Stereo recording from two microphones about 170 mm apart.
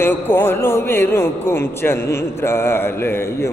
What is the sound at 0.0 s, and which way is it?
A man's voice, 10° left (ahead or behind).